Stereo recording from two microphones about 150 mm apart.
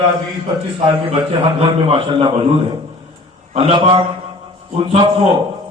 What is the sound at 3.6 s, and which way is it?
A man's voice, 35° right (ahead or behind).